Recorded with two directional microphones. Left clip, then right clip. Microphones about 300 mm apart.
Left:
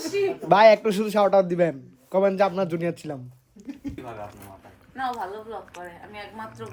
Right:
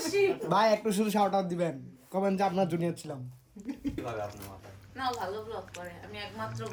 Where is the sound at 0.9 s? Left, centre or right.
Centre.